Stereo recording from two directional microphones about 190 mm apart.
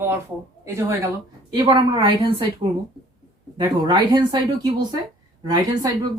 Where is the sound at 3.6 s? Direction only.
20° right (ahead or behind).